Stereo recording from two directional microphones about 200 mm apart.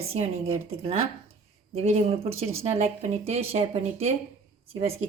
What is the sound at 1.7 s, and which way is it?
Speech, 30° right (ahead or behind).